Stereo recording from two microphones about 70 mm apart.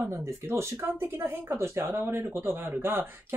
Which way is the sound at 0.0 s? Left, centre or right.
Right.